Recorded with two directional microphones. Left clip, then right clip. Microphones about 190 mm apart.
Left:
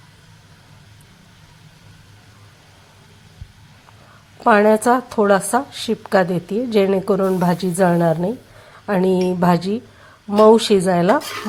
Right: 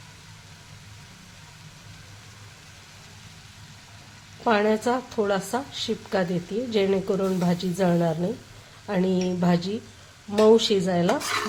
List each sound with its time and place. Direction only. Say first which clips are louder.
4.4 s a woman's voice: left 9 dB; 30° left (ahead or behind)